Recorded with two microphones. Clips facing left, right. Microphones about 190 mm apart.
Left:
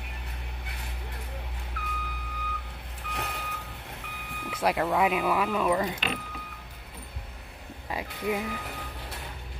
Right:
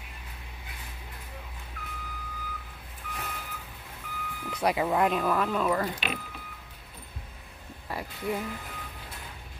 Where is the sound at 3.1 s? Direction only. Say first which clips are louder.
Left 3 dB; 70° left (ahead or behind).